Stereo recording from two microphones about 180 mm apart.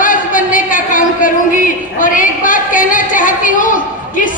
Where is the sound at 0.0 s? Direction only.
50° left (ahead or behind).